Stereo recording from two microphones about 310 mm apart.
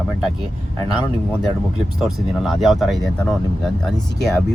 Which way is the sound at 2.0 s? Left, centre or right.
Centre.